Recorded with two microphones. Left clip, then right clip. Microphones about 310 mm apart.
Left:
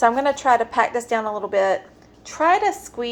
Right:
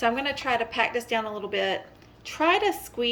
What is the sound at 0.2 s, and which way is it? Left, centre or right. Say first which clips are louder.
Speech: left 9 dB; left.